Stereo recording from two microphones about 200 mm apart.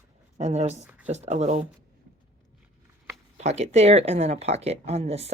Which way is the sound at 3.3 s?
35° right (ahead or behind).